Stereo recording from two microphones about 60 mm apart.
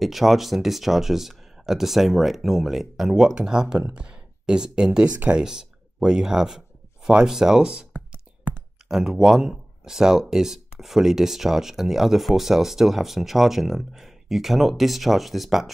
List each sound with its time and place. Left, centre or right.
0.0 s speech: centre
8.8 s speech: centre